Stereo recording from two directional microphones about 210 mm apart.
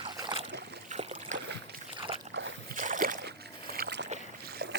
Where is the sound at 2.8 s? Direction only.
40° right (ahead or behind).